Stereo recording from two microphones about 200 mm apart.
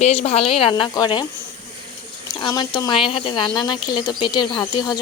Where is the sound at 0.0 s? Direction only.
30° left (ahead or behind).